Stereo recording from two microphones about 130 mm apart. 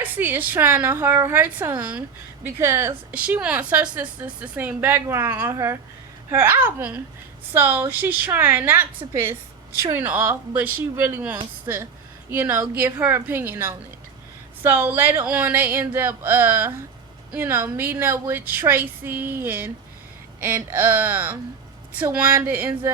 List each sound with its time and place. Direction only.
0.0 s a woman's voice: 15° right (ahead or behind)